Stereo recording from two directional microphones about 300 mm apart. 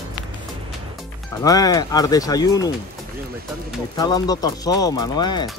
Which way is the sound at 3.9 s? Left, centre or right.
Centre.